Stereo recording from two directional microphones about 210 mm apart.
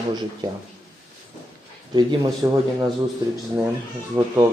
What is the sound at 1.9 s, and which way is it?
Speech, 20° right (ahead or behind).